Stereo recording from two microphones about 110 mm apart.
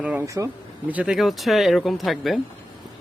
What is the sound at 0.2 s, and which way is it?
Speech, 25° right (ahead or behind).